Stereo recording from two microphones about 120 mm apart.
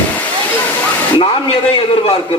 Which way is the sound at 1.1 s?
45° left (ahead or behind).